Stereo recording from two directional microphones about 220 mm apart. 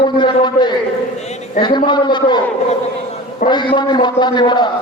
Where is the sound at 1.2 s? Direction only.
30° left (ahead or behind).